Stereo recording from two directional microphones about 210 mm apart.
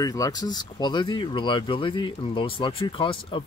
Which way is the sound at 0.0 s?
15° left (ahead or behind).